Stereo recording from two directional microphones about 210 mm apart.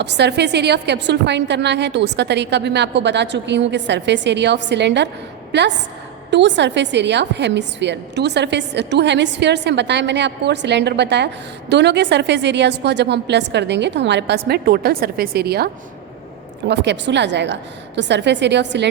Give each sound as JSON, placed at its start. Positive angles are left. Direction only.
{"t": 0.0, "sound": "a woman's voice", "side_deg": -55}